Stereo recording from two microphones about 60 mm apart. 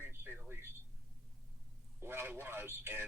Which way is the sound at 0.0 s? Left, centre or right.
Right.